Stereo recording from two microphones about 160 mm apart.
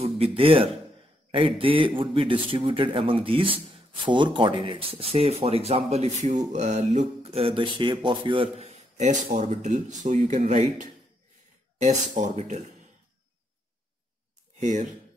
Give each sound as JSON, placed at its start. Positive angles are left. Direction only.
{"t": 0.4, "sound": "speech", "side_deg": -35}
{"t": 14.6, "sound": "speech", "side_deg": -55}